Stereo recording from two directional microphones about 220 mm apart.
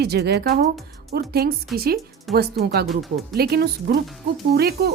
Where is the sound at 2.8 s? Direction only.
Centre (ahead or behind).